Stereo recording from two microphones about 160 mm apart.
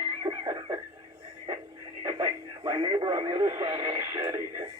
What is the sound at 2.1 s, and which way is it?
Speech, 25° right (ahead or behind).